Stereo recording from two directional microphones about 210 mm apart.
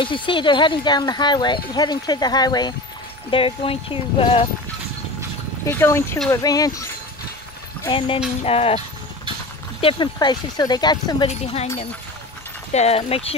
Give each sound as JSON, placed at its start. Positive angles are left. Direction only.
{"t": 0.0, "sound": "speech", "side_deg": 25}
{"t": 5.7, "sound": "speech", "side_deg": 10}
{"t": 8.5, "sound": "speech", "side_deg": 30}
{"t": 12.7, "sound": "speech", "side_deg": 30}